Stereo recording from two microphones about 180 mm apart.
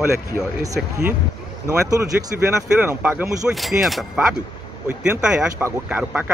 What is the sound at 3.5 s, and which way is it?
Speech, centre (ahead or behind).